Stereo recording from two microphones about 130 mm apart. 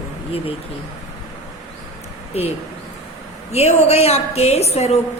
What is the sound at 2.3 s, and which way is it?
A woman's voice, 55° left (ahead or behind).